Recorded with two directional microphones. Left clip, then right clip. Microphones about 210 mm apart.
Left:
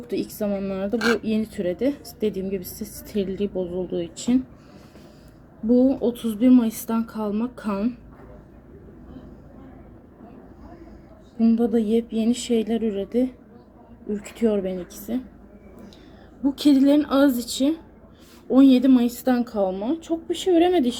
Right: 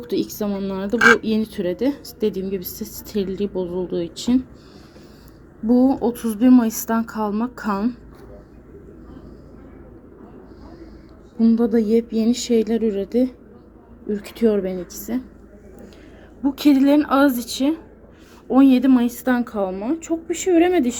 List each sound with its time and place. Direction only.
0.3 s speech: 10° right (ahead or behind)
5.6 s speech: 15° right (ahead or behind)
11.3 s speech: 10° right (ahead or behind)
16.4 s speech: 10° right (ahead or behind)